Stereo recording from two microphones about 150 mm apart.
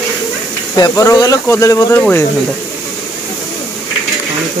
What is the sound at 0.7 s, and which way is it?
Speech, 25° left (ahead or behind).